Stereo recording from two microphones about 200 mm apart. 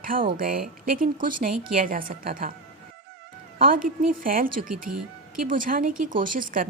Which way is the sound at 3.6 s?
45° right (ahead or behind).